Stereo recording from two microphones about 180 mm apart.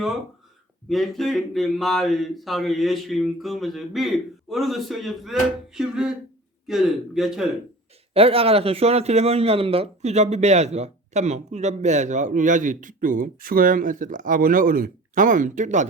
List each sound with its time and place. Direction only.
0.9 s speech: centre (ahead or behind)
8.1 s speech: 30° right (ahead or behind)